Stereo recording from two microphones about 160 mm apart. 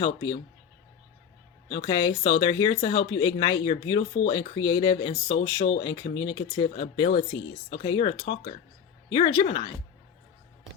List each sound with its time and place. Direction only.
0.0 s speech: 25° left (ahead or behind)
1.7 s speech: 30° left (ahead or behind)